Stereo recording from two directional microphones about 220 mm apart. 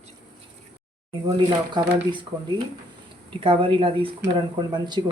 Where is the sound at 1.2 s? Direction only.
20° right (ahead or behind).